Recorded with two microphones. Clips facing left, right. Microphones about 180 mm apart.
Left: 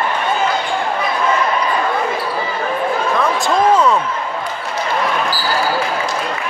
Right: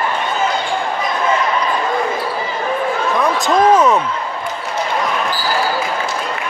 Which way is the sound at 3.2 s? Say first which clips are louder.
Right 3 dB; 20° right (ahead or behind).